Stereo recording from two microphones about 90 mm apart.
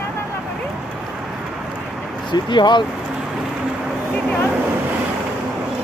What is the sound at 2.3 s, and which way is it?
Speech, 55° left (ahead or behind).